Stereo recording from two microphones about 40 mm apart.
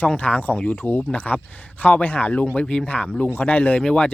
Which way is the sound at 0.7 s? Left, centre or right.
Left.